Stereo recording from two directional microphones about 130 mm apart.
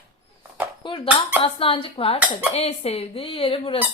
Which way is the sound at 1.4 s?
45° left (ahead or behind).